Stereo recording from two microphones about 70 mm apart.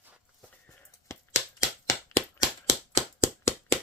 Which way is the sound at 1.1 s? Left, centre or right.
Left.